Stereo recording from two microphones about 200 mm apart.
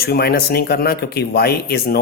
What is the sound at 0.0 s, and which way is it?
Speech, 50° left (ahead or behind).